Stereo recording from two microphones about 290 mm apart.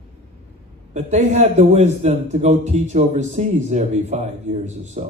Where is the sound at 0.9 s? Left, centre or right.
Right.